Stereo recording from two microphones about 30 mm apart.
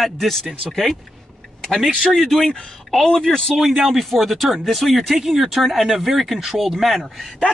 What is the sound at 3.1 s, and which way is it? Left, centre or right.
Speech, left.